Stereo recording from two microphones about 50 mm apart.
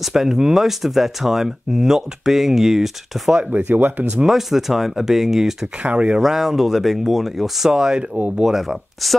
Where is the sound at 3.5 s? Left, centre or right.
Right.